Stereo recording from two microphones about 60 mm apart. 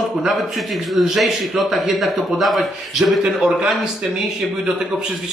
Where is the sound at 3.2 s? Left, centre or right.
Centre.